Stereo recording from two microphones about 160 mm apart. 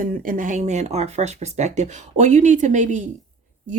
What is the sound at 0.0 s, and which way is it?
Speech, 60° right (ahead or behind).